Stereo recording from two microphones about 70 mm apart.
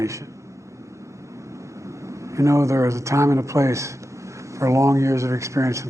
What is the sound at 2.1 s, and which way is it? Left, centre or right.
Speech, right.